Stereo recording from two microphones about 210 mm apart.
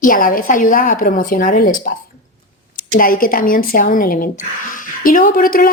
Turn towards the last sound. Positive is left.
turn(degrees=45)  # may be behind; listen again after turning